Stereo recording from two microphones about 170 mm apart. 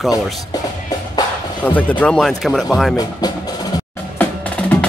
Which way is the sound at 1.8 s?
10° left (ahead or behind).